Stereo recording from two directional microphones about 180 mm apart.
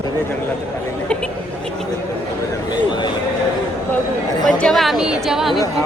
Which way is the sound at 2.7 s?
25° left (ahead or behind).